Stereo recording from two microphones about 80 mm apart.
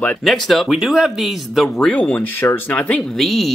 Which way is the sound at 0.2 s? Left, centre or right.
Centre.